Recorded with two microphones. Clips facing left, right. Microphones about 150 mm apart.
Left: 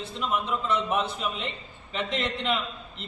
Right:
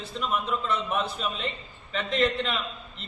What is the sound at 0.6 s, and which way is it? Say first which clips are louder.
A man's voice: left 2 dB; 20° left (ahead or behind).